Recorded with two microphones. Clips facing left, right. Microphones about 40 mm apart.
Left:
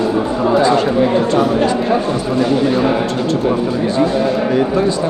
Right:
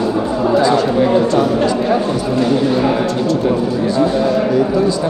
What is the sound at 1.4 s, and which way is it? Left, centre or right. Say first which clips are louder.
Speech: even; centre.